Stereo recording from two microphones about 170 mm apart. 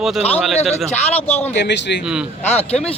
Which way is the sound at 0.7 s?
40° left (ahead or behind).